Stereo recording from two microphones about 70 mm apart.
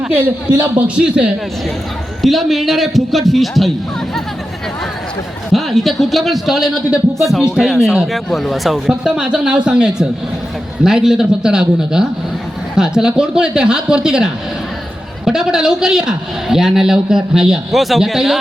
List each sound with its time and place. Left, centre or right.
0.1 s speech: right
1.0 s a man's voice: centre
2.2 s a man's voice: centre
5.5 s a man's voice: centre
8.9 s a man's voice: centre